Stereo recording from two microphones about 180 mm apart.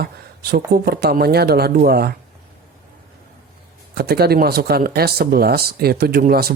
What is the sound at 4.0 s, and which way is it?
Speech, 60° right (ahead or behind).